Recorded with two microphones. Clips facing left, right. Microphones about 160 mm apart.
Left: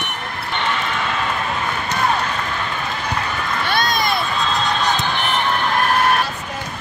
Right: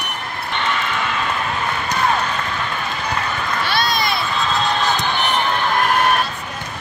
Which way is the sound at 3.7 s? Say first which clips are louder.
Left 2 dB; 50° left (ahead or behind).